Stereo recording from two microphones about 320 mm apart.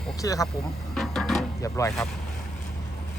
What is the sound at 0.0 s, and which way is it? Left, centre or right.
Speech, centre.